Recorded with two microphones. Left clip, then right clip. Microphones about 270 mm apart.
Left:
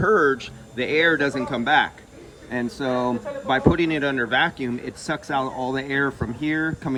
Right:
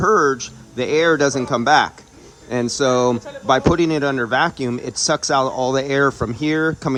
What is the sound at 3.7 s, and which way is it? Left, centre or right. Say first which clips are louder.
Speech: right 4 dB; centre.